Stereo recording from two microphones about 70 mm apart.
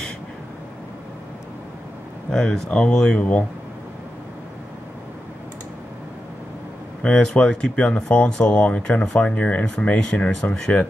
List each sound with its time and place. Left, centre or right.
2.3 s speech: centre
3.2 s speech: centre
7.0 s speech: centre